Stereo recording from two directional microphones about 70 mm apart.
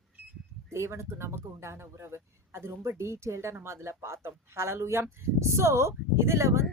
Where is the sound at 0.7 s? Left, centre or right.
Right.